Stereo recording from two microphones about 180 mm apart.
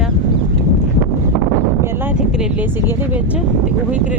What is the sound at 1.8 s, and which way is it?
Speech, 10° right (ahead or behind).